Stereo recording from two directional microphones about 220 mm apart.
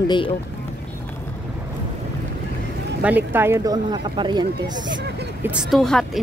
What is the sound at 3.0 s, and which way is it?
Speech, 10° right (ahead or behind).